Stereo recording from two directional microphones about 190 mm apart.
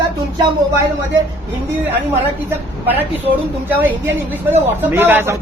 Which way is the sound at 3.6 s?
10° right (ahead or behind).